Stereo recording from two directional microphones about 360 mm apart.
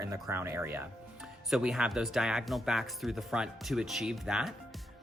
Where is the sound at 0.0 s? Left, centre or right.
Centre.